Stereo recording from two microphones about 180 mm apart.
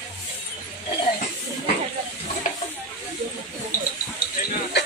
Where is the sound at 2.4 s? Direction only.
45° left (ahead or behind).